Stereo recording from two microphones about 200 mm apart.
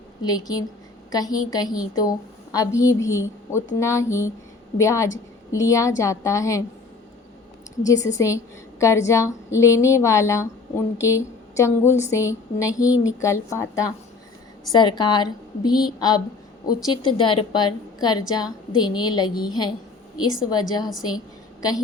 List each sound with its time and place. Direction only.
0.3 s a woman's voice: 20° left (ahead or behind)
7.9 s a woman's voice: 15° left (ahead or behind)
14.7 s a woman's voice: 20° left (ahead or behind)